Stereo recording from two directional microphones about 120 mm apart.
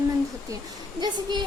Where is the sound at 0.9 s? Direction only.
35° right (ahead or behind).